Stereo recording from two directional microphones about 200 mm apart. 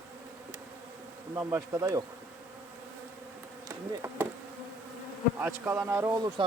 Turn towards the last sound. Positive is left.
turn(degrees=-20)  # may be behind; listen again after turning